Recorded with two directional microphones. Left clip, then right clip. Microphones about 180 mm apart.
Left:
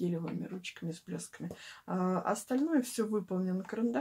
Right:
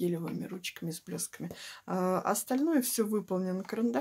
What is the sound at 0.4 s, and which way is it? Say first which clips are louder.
Speech: right 3 dB; 30° right (ahead or behind).